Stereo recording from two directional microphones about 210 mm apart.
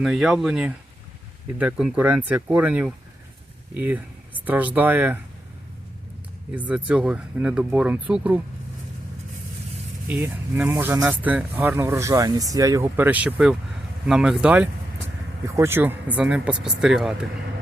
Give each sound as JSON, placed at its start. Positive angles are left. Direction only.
{"t": 0.0, "sound": "speech", "side_deg": 0}
{"t": 6.5, "sound": "speech", "side_deg": -5}
{"t": 10.1, "sound": "speech", "side_deg": -10}